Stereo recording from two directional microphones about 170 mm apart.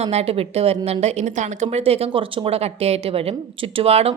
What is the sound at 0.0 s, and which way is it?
A woman's voice, 40° right (ahead or behind).